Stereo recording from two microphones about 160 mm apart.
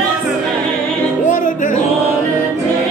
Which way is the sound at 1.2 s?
55° left (ahead or behind).